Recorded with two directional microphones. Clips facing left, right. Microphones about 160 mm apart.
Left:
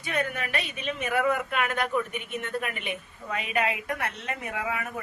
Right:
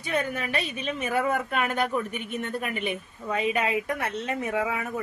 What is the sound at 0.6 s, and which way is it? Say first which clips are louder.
A woman's voice: right 2 dB; 35° right (ahead or behind).